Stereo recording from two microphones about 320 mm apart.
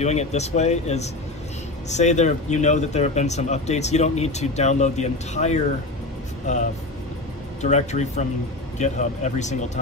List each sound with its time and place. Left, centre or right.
0.0 s speech: left